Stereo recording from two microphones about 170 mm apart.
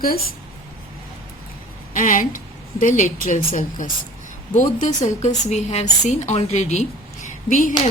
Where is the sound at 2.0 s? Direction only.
50° left (ahead or behind).